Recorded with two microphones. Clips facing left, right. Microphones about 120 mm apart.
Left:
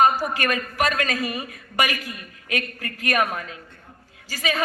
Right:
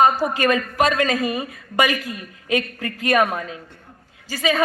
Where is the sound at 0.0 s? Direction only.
25° right (ahead or behind).